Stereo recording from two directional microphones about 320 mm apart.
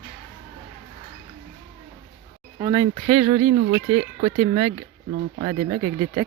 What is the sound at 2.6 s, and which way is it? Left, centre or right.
Speech, centre.